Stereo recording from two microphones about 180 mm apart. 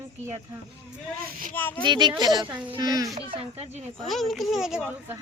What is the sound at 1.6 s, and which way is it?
Speech, 10° left (ahead or behind).